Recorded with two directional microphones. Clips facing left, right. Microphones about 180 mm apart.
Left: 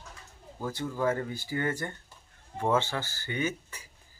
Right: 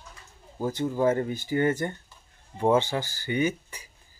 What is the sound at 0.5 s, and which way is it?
Speech, 20° right (ahead or behind).